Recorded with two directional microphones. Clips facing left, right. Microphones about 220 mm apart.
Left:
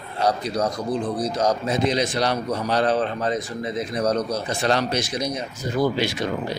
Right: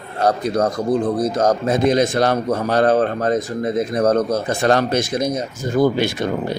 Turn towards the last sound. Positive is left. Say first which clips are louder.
# right 4 dB
turn(degrees=-50)  # may be behind; listen again after turning